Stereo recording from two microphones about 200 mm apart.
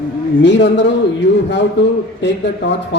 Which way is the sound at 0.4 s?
60° left (ahead or behind).